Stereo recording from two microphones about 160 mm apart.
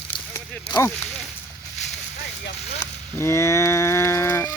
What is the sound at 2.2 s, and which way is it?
Vehicle, 90° left.